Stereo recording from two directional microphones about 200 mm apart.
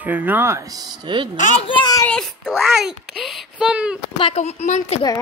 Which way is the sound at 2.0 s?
5° left (ahead or behind).